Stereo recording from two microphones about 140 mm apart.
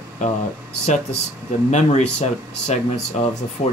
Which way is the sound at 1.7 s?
55° left (ahead or behind).